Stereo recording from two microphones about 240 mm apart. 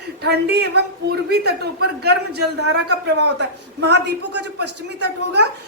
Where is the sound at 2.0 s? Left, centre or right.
Right.